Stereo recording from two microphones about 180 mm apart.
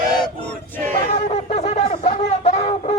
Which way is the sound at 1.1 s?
35° left (ahead or behind).